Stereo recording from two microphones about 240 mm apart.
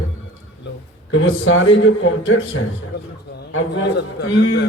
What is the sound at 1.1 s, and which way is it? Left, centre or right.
A man's voice, left.